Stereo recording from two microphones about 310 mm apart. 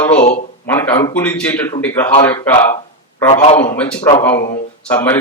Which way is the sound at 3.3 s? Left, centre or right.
Centre.